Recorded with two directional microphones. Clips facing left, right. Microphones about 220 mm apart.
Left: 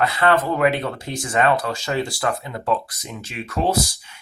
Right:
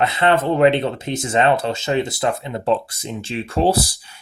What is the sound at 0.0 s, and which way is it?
Speech, 25° right (ahead or behind).